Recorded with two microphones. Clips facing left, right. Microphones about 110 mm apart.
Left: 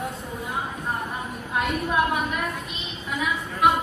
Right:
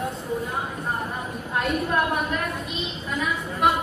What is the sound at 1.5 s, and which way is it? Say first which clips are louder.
Speech: even; 5° left (ahead or behind).